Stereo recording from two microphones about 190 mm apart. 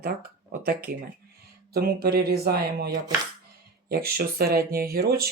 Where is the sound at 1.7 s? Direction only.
55° right (ahead or behind).